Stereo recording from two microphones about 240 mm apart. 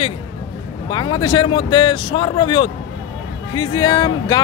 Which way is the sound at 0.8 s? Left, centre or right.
Centre.